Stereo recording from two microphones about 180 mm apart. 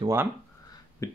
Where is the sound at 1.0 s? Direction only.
15° left (ahead or behind).